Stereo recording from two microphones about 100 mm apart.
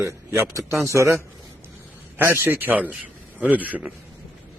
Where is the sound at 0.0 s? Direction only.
25° right (ahead or behind).